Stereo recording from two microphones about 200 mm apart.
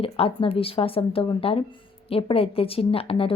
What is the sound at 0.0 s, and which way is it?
A woman's voice, 25° left (ahead or behind).